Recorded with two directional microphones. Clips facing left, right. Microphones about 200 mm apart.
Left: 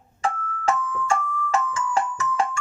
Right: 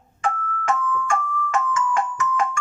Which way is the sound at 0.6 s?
30° left (ahead or behind).